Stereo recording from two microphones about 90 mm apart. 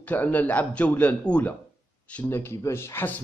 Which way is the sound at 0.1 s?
20° left (ahead or behind).